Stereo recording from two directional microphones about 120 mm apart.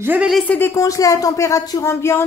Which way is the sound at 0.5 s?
20° left (ahead or behind).